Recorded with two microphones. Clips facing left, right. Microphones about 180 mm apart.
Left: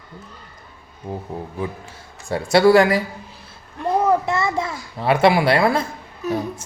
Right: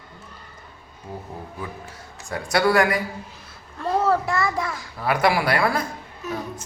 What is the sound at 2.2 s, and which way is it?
A child's voice, 25° left (ahead or behind).